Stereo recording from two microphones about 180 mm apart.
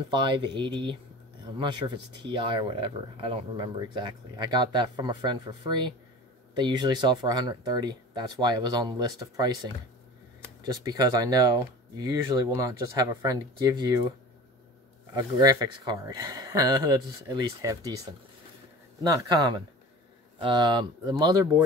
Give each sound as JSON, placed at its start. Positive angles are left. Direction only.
{"t": 0.1, "sound": "speech", "side_deg": -25}
{"t": 15.1, "sound": "speech", "side_deg": -20}
{"t": 19.0, "sound": "speech", "side_deg": -20}